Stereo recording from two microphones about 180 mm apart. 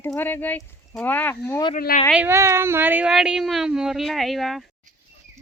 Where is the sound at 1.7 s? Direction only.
45° left (ahead or behind).